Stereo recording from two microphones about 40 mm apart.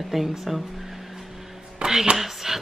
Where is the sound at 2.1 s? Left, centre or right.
Centre.